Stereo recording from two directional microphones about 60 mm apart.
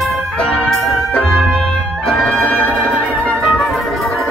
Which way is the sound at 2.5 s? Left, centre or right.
Left.